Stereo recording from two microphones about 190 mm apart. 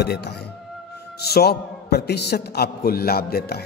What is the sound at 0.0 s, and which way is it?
A man's voice, 60° left (ahead or behind).